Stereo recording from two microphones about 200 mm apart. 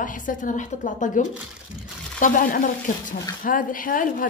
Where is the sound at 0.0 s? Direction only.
40° left (ahead or behind).